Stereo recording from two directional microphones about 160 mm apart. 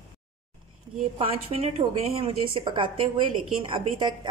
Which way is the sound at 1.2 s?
35° right (ahead or behind).